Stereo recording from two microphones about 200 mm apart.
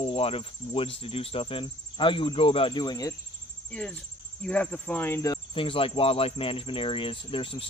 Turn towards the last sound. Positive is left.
turn(degrees=25)  # may be behind; listen again after turning